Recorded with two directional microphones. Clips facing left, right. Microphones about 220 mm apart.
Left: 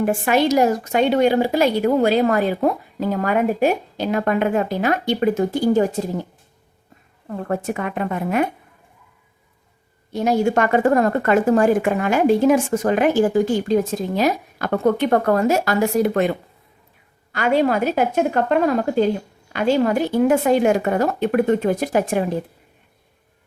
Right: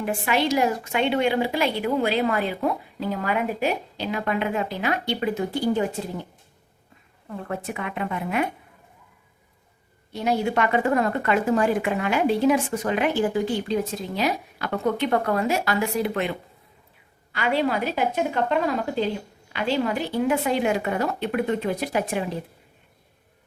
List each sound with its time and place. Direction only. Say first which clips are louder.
0.0 s speech: left 6 dB; 45° left (ahead or behind)
7.3 s speech: left 7 dB; 50° left (ahead or behind)
10.1 s speech: left 6 dB; 45° left (ahead or behind)